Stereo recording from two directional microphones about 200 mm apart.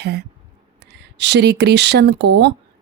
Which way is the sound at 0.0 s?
55° right (ahead or behind).